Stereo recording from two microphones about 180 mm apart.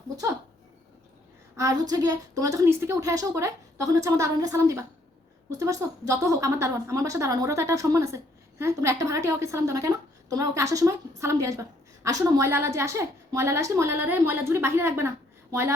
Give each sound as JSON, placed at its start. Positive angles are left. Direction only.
{"t": 1.5, "sound": "a woman's voice", "side_deg": -20}